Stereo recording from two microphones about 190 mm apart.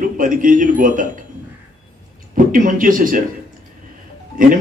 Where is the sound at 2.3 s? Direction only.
45° right (ahead or behind).